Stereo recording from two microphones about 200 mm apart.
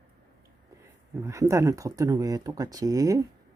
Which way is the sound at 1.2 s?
15° right (ahead or behind).